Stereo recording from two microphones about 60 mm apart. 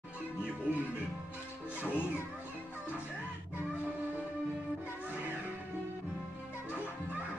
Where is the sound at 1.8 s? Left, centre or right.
Left.